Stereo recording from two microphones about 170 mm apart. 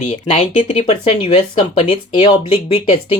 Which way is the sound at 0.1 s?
35° left (ahead or behind).